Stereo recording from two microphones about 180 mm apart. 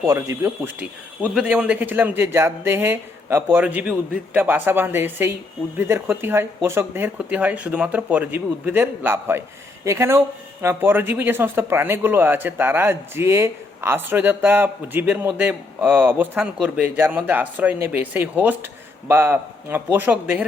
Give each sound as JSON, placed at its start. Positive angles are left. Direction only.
{"t": 0.0, "sound": "speech", "side_deg": -20}